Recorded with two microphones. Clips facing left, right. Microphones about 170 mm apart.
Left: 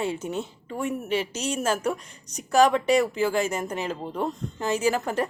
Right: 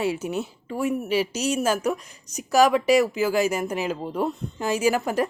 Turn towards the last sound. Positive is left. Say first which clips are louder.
# right 2 dB
turn(degrees=-10)  # may be behind; listen again after turning